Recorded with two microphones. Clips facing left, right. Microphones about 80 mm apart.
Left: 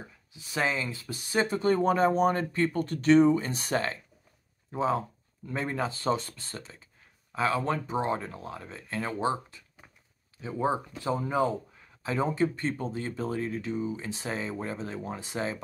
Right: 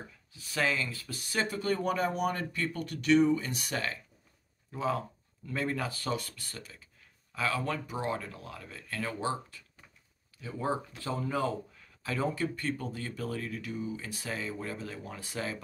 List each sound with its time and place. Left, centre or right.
0.3 s speech: left